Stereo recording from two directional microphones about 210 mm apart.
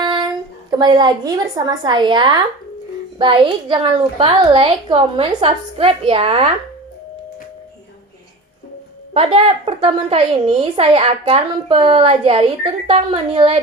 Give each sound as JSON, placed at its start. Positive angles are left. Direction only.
{"t": 0.0, "sound": "a sound", "side_deg": -20}
{"t": 0.7, "sound": "a woman's voice", "side_deg": -20}
{"t": 9.1, "sound": "a woman's voice", "side_deg": -25}